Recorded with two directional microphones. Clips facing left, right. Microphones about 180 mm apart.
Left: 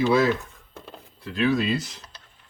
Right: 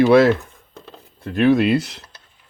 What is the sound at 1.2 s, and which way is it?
Speech, 55° right (ahead or behind).